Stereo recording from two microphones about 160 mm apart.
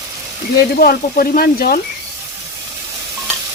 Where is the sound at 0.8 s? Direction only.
65° left (ahead or behind).